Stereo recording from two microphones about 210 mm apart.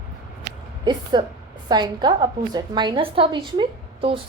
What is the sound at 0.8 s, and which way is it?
A woman's voice, 20° right (ahead or behind).